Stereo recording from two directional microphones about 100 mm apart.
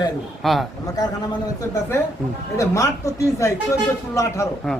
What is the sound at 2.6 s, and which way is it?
A man's voice, 30° left (ahead or behind).